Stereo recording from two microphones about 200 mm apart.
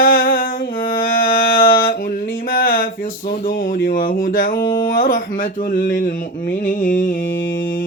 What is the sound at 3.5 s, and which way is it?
Speech, 45° left (ahead or behind).